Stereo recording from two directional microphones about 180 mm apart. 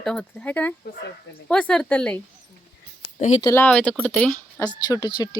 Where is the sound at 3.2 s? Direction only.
40° left (ahead or behind).